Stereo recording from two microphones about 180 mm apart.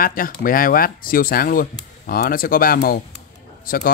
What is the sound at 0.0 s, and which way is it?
Speech, 55° left (ahead or behind).